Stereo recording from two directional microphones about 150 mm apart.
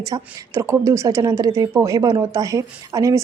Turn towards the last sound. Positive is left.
turn(degrees=-20)  # may be behind; listen again after turning